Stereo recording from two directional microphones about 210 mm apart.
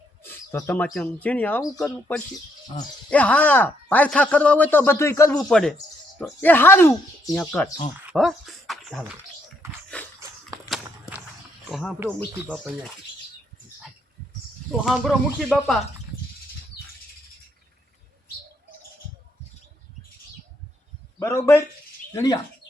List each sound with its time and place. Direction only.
0.2 s bird: 10° left (ahead or behind)
0.9 s speech: 5° left (ahead or behind)
5.4 s speech: centre (ahead or behind)
8.0 s a sound: centre (ahead or behind)
9.6 s a sound: 15° right (ahead or behind)
11.7 s speech: centre (ahead or behind)
14.7 s speech: centre (ahead or behind)
21.2 s speech: 15° left (ahead or behind)